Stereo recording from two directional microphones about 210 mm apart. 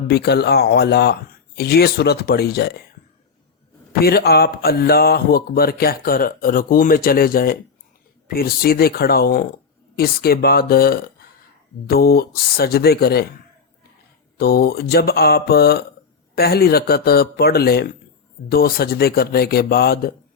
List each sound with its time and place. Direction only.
0.1 s speech: 50° left (ahead or behind)
4.0 s speech: 50° left (ahead or behind)
14.3 s speech: 50° left (ahead or behind)